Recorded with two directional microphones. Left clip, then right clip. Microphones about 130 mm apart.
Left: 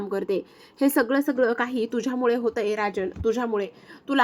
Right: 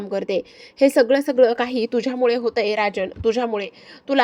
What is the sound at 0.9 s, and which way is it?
A woman's voice, 30° right (ahead or behind).